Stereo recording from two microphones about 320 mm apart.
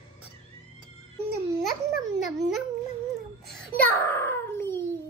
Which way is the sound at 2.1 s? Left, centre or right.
Centre.